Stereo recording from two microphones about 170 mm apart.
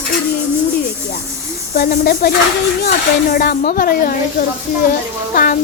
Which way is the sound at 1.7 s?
55° left (ahead or behind).